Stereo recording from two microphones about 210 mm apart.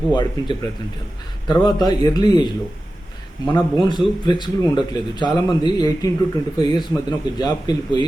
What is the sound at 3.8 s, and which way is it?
A man's voice, 20° left (ahead or behind).